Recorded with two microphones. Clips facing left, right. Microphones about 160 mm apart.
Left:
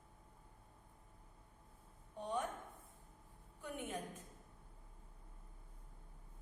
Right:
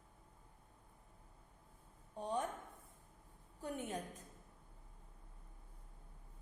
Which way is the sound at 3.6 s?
40° right (ahead or behind).